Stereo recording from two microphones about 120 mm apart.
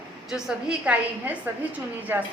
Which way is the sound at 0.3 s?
5° right (ahead or behind).